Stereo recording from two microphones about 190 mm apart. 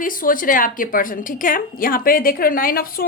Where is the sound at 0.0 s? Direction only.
45° left (ahead or behind).